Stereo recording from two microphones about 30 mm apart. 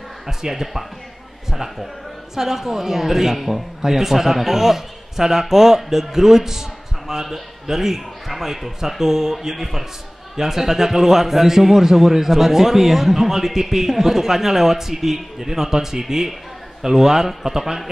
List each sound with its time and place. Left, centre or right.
0.3 s a man's voice: centre
2.3 s a man's voice: centre